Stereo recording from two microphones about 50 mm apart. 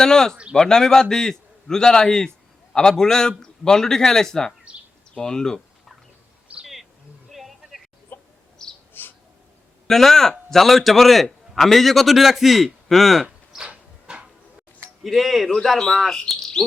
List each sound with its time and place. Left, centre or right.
0.0 s a man's voice: centre
6.5 s a sound: right
7.3 s a sound: centre
8.1 s chicken: left
8.9 s bird: left
9.8 s a man's voice: centre
13.7 s a sound: right
15.0 s a man's voice: centre
16.6 s frog: centre